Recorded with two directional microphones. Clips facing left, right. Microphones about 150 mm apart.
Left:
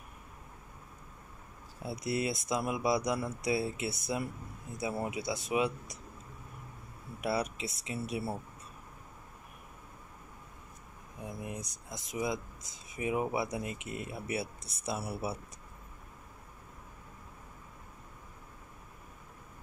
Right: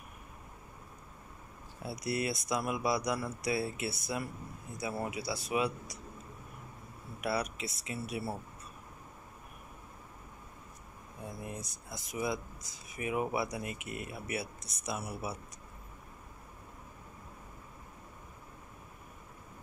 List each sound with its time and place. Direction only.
1.8 s speech: 25° left (ahead or behind)
5.0 s speech: 20° left (ahead or behind)
7.2 s speech: 25° left (ahead or behind)
11.2 s speech: 15° left (ahead or behind)